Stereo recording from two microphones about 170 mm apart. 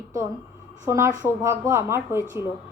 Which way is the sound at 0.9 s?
15° right (ahead or behind).